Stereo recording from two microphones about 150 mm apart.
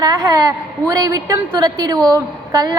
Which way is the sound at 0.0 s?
25° right (ahead or behind).